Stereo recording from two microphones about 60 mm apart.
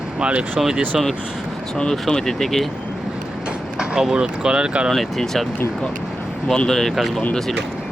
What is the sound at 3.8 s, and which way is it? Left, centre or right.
Speech, centre.